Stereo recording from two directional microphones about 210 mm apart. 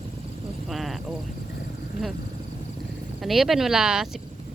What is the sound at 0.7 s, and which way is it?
Speech, centre (ahead or behind).